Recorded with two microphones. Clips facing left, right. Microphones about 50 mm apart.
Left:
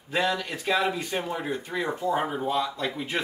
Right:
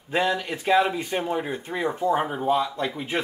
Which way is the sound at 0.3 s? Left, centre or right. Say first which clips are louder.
Right 4 dB; centre.